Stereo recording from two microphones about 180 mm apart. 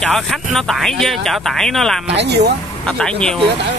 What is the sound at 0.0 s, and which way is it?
Speech, centre (ahead or behind).